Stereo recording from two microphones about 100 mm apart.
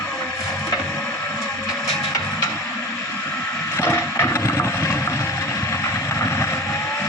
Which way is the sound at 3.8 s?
25° left (ahead or behind).